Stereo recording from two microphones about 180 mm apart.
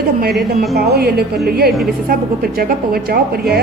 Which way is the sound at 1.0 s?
65° right (ahead or behind).